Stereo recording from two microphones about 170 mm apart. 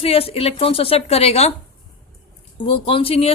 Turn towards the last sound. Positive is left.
turn(degrees=35)  # may be behind; listen again after turning